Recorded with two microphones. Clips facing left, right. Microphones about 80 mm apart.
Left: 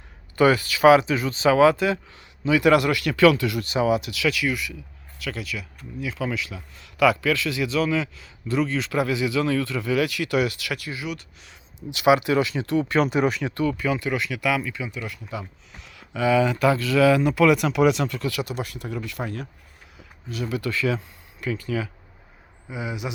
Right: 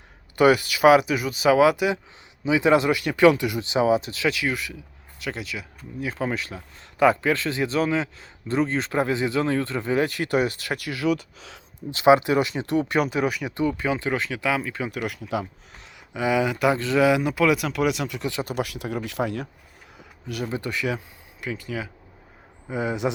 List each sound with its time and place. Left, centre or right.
0.3 s speech: right
6.1 s a man's voice: right
10.8 s speech: right
11.9 s speech: right
13.1 s speech: centre; by 14.7 s right
14.7 s a man's voice: right
15.0 s speech: right
16.0 s speech: centre
16.7 s speech: right
17.1 s speech: centre
18.2 s speech: right
18.4 s speech: right
20.5 s speech: right
22.7 s a man's voice: right